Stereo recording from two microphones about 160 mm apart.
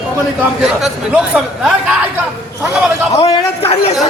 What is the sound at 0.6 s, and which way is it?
A man's voice, 5° right (ahead or behind).